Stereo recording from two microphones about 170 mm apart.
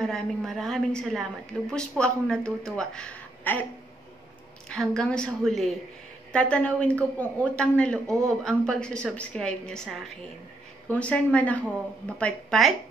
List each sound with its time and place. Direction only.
0.0 s speech: 5° left (ahead or behind)
4.6 s speech: 5° left (ahead or behind)